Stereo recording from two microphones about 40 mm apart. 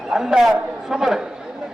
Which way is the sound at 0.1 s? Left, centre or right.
Centre.